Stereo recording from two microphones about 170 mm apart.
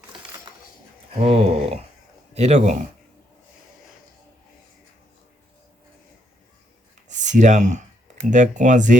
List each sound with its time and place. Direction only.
1.2 s speech: 40° right (ahead or behind)
7.1 s speech: 45° right (ahead or behind)